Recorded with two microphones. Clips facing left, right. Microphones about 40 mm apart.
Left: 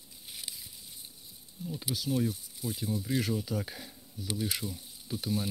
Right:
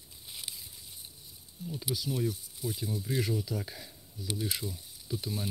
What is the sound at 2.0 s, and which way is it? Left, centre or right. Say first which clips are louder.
Speech: left 3 dB; centre.